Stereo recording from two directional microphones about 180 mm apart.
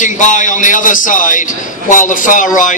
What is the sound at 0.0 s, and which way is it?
A man's voice, 45° left (ahead or behind).